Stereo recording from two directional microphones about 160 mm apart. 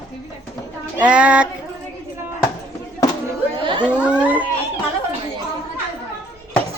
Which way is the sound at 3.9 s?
10° right (ahead or behind).